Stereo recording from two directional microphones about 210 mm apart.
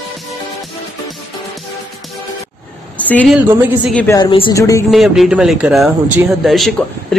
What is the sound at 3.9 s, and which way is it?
Speech, 5° left (ahead or behind).